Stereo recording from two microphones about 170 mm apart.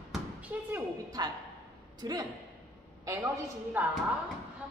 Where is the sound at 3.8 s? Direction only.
10° right (ahead or behind).